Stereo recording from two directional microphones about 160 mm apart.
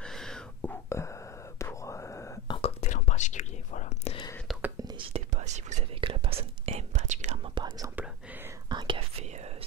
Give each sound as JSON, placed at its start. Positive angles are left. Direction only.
{"t": 0.0, "sound": "whispering", "side_deg": 5}
{"t": 2.5, "sound": "whispering", "side_deg": 40}
{"t": 4.5, "sound": "whispering", "side_deg": -10}
{"t": 4.7, "sound": "whispering", "side_deg": -25}
{"t": 5.1, "sound": "whispering", "side_deg": -45}
{"t": 5.9, "sound": "whispering", "side_deg": -35}
{"t": 7.5, "sound": "whispering", "side_deg": -30}